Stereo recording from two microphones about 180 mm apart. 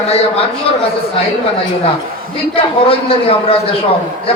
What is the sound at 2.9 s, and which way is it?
Speech, 30° left (ahead or behind).